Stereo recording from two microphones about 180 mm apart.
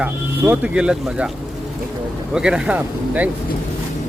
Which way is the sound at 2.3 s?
5° right (ahead or behind).